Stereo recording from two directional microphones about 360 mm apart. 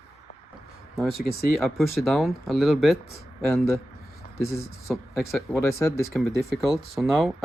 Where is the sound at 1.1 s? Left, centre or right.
Left.